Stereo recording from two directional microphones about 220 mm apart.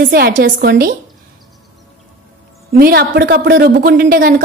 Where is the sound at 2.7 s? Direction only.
40° right (ahead or behind).